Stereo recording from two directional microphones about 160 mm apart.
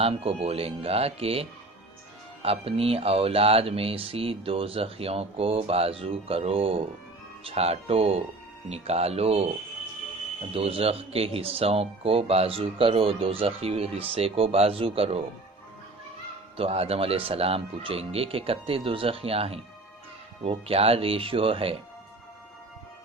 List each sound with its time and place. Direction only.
0.0 s speech: 35° right (ahead or behind)
10.5 s speech: 35° right (ahead or behind)
16.6 s speech: 40° right (ahead or behind)